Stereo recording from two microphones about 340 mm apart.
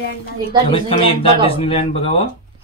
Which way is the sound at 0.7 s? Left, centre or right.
Centre.